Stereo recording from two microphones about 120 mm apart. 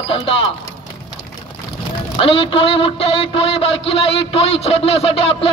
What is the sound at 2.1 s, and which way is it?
Speech, 50° left (ahead or behind).